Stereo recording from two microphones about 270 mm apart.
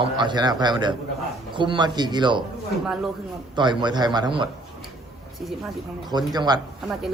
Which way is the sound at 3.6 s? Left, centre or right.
Centre.